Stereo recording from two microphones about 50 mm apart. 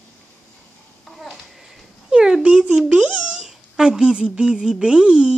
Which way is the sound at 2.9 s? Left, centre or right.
Centre.